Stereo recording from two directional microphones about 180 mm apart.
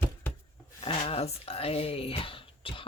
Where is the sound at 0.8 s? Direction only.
30° left (ahead or behind).